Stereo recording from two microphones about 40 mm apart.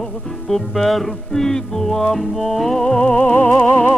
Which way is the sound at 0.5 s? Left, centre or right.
Centre.